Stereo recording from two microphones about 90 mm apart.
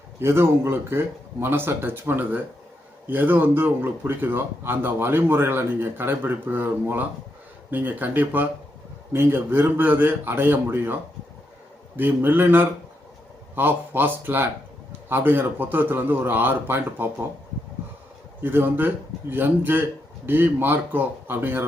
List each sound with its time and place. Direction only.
0.2 s speech: 30° right (ahead or behind)
11.9 s speech: 20° right (ahead or behind)
18.4 s speech: 25° right (ahead or behind)